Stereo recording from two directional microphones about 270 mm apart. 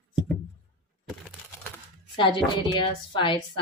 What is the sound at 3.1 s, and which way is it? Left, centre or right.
Speech, centre.